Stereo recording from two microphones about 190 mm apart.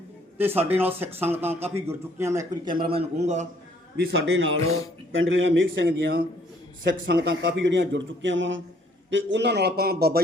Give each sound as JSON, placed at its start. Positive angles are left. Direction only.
{"t": 0.7, "sound": "a man's voice", "side_deg": -10}
{"t": 3.9, "sound": "a man's voice", "side_deg": -55}
{"t": 5.1, "sound": "a man's voice", "side_deg": -85}